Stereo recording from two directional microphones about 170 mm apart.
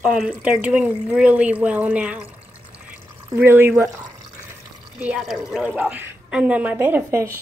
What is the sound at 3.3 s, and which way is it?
Speech, 15° right (ahead or behind).